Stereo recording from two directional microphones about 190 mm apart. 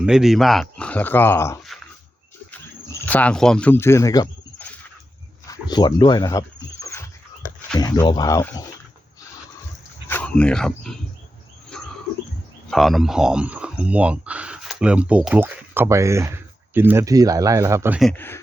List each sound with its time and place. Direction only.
0.0 s speech: 5° right (ahead or behind); by 1.5 s 15° left (ahead or behind)
3.1 s speech: 5° left (ahead or behind)
6.8 s a sound: 20° left (ahead or behind)
7.8 s speech: 20° left (ahead or behind)
10.1 s speech: 5° left (ahead or behind)
11.7 s bird: 5° left (ahead or behind)
12.7 s speech: centre (ahead or behind)
18.0 s speech: 10° left (ahead or behind)